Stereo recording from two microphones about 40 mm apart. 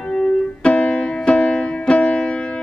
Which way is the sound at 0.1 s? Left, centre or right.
Left.